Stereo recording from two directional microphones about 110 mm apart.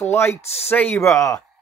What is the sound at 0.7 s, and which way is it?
Speech, 20° left (ahead or behind).